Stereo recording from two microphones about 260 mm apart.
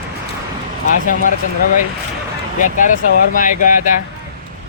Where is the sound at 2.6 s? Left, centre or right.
Left.